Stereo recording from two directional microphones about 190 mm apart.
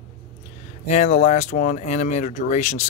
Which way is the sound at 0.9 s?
35° left (ahead or behind).